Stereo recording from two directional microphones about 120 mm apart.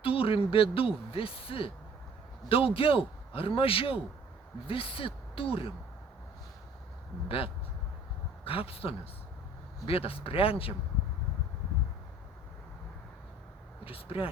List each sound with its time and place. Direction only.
0.0 s speech: 50° left (ahead or behind)
7.3 s speech: 50° left (ahead or behind)
13.8 s speech: 50° left (ahead or behind)